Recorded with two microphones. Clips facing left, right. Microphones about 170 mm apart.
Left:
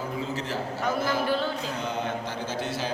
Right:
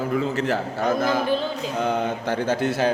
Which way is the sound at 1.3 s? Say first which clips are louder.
Right 3 dB; 20° right (ahead or behind).